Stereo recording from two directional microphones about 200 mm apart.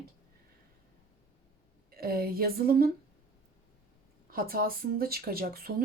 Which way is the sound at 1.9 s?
50° right (ahead or behind).